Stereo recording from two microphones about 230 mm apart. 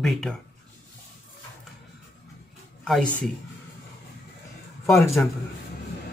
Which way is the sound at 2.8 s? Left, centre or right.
Centre.